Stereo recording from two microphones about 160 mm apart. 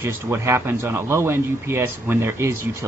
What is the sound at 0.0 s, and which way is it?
Speech, 15° right (ahead or behind).